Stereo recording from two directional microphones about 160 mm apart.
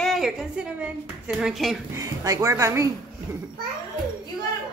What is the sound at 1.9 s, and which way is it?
Speech, 20° right (ahead or behind).